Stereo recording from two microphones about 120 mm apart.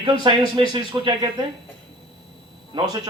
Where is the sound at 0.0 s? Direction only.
40° right (ahead or behind).